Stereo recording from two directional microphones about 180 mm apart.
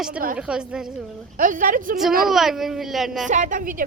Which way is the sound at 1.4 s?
45° right (ahead or behind).